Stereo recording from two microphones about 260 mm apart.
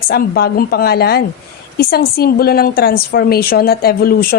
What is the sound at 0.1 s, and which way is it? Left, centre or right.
A woman's voice, left.